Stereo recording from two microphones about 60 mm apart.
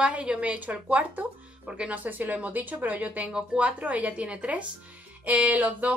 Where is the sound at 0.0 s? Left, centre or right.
Centre.